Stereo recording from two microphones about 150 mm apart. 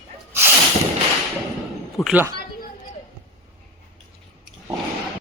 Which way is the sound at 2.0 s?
5° right (ahead or behind).